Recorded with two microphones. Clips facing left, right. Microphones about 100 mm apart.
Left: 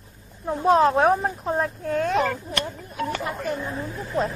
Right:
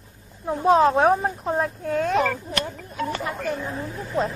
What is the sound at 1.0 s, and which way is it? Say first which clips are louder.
Speech: right 1 dB; centre (ahead or behind).